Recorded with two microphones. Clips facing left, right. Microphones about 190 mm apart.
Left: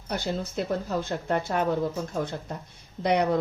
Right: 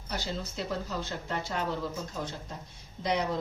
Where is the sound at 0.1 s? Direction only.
55° left (ahead or behind).